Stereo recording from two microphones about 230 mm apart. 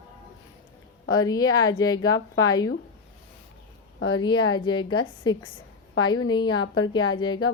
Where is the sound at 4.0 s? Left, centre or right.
Left.